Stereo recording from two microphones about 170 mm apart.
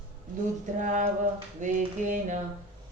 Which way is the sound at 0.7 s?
50° right (ahead or behind).